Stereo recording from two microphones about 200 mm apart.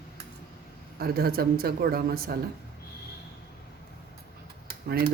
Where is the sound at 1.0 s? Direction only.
50° right (ahead or behind).